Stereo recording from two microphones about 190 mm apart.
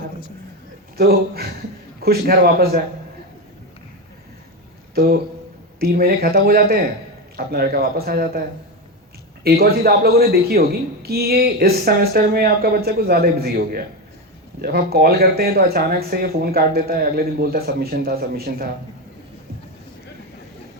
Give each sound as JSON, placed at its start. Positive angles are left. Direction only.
{"t": 0.9, "sound": "a man's voice", "side_deg": -55}
{"t": 4.9, "sound": "speech", "side_deg": -55}
{"t": 9.4, "sound": "a man's voice", "side_deg": -55}